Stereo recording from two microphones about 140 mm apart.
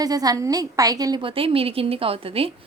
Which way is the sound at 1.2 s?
40° right (ahead or behind).